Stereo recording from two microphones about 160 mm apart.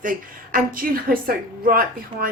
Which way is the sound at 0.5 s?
60° right (ahead or behind).